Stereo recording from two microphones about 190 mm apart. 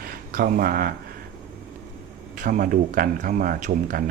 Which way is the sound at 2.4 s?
45° right (ahead or behind).